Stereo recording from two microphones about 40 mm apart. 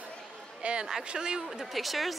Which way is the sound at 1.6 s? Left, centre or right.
Centre.